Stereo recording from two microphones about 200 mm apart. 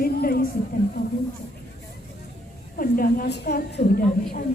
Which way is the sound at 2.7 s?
45° left (ahead or behind).